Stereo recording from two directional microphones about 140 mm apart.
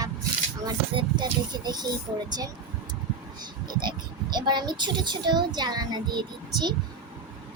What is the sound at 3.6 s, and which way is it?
A child's voice, 30° right (ahead or behind).